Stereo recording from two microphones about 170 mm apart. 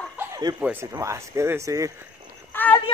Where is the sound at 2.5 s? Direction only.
10° left (ahead or behind).